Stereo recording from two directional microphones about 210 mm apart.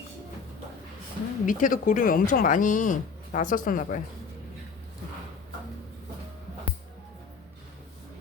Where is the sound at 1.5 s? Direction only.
40° left (ahead or behind).